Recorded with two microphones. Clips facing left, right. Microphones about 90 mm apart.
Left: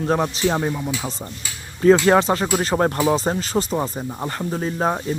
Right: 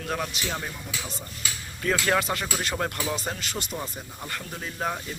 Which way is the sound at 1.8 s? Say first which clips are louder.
Left 11 dB; 30° left (ahead or behind).